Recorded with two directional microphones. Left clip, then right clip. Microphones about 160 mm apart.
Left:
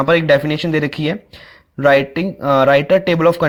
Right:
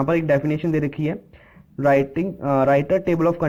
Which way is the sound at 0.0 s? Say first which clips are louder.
Left 7 dB; 40° left (ahead or behind).